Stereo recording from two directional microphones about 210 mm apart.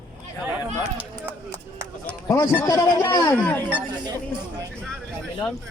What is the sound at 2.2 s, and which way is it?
A man's voice, 15° left (ahead or behind).